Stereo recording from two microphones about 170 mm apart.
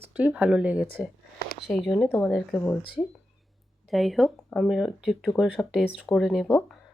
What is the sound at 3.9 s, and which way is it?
Speech, centre (ahead or behind).